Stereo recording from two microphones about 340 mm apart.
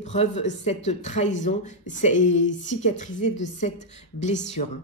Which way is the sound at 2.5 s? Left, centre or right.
Left.